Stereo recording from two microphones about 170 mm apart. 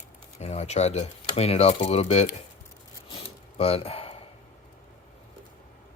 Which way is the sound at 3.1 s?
35° left (ahead or behind).